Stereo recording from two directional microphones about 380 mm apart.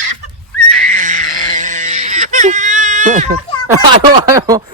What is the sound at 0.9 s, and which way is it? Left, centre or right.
Baby cry, centre.